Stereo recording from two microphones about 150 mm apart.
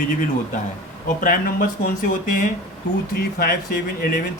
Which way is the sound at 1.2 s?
65° left (ahead or behind).